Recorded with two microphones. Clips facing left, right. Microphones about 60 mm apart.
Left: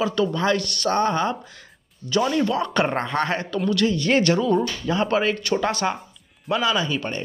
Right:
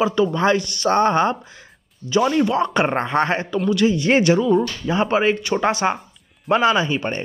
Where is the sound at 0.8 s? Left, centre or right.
Right.